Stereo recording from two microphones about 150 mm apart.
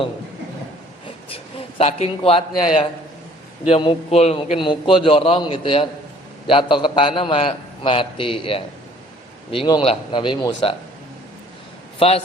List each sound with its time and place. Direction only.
1.8 s a man's voice: 45° left (ahead or behind)
11.9 s a man's voice: 40° left (ahead or behind)